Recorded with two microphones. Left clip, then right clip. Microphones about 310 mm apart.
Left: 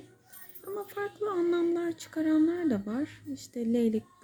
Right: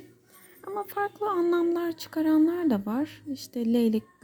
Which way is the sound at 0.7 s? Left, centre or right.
Centre.